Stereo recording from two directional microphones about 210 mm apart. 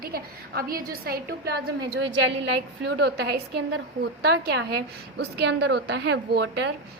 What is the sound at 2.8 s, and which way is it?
A woman's voice, 50° right (ahead or behind).